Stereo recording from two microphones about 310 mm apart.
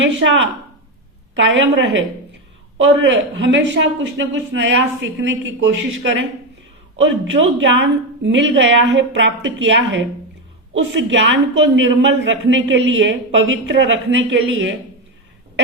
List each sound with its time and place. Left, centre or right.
0.0 s speech: right
1.4 s speech: right